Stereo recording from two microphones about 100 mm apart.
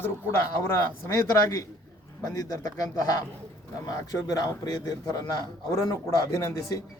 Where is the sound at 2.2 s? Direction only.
35° left (ahead or behind).